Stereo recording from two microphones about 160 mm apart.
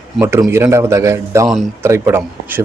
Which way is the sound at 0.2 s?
15° right (ahead or behind).